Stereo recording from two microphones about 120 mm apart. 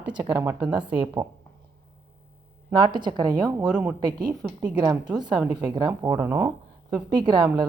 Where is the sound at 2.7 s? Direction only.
40° right (ahead or behind).